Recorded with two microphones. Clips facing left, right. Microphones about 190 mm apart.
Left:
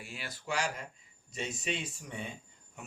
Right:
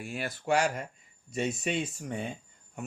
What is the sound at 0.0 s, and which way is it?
Speech, 50° right (ahead or behind).